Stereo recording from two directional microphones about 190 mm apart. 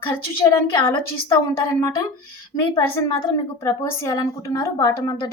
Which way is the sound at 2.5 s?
25° left (ahead or behind).